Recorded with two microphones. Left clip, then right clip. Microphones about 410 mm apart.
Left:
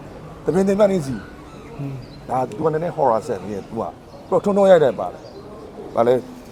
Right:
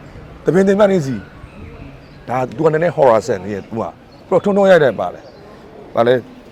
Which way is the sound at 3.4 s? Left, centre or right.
Right.